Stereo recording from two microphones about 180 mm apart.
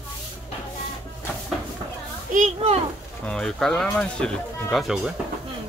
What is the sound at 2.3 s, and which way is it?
Children playing, 40° right (ahead or behind).